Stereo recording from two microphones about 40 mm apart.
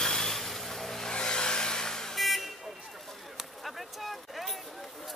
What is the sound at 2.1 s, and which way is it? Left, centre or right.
Vehicle, centre.